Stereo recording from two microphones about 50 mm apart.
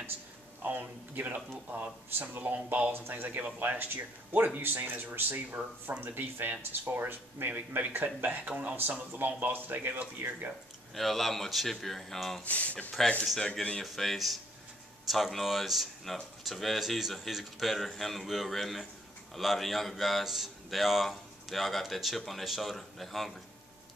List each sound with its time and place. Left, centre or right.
0.6 s speech: right
2.9 s speech: right
11.0 s speech: centre
12.4 s speech: left
13.8 s speech: centre